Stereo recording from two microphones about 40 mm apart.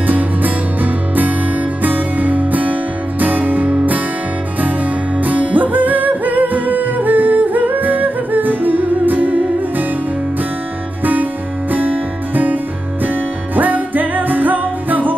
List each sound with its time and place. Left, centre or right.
0.0 s music: right
5.2 s music: right
11.7 s music: right
13.6 s music: right